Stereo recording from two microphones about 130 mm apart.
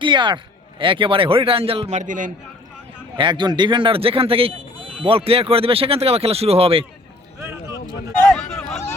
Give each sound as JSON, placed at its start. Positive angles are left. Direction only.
{"t": 0.0, "sound": "speech", "side_deg": -35}
{"t": 2.0, "sound": "a man's voice", "side_deg": -85}
{"t": 3.2, "sound": "speech", "side_deg": -35}
{"t": 8.3, "sound": "a sound", "side_deg": 10}